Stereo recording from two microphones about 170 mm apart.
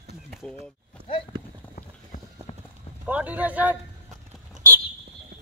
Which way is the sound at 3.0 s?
10° right (ahead or behind).